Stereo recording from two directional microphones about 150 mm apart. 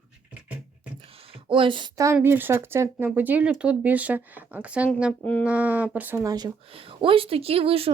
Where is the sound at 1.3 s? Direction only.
35° right (ahead or behind); by 6.3 s 15° right (ahead or behind).